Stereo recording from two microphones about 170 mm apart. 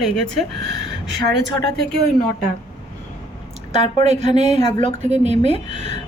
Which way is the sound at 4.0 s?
40° right (ahead or behind).